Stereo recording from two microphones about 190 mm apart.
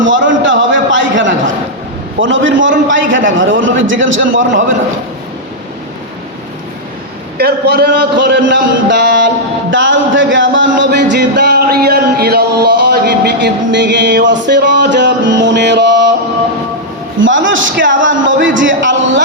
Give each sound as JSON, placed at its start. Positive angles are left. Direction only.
{"t": 0.0, "sound": "a sound", "side_deg": -85}
{"t": 2.1, "sound": "a man's voice", "side_deg": -75}
{"t": 7.3, "sound": "a man's voice", "side_deg": -55}
{"t": 9.6, "sound": "speech", "side_deg": -80}
{"t": 17.2, "sound": "a man's voice", "side_deg": -80}